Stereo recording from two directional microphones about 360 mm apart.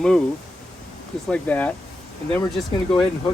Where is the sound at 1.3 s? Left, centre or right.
Centre.